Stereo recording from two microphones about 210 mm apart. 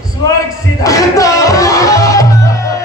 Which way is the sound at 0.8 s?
15° left (ahead or behind).